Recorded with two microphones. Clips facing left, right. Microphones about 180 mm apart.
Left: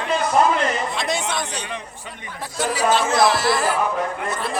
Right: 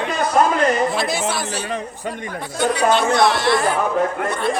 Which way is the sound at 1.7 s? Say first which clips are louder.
Right 7 dB; 45° right (ahead or behind).